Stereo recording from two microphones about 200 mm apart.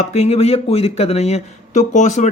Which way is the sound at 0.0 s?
30° left (ahead or behind).